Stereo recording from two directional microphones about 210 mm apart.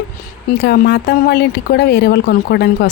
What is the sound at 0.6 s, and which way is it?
Speech, 50° left (ahead or behind).